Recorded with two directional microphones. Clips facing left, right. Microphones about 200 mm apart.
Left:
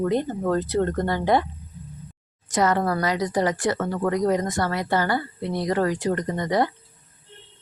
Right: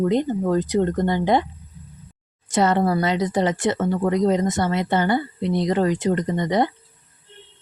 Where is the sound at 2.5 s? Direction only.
25° right (ahead or behind).